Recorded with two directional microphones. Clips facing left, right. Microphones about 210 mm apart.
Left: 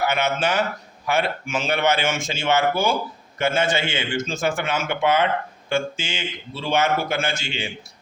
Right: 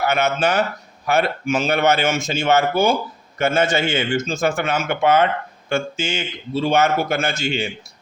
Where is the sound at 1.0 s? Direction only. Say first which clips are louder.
Right 4 dB; 40° right (ahead or behind).